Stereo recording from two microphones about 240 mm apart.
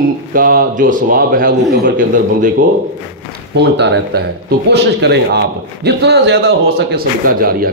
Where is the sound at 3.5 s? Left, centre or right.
Right.